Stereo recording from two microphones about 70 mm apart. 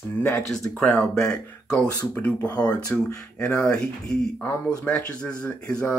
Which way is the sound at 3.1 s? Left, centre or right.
Centre.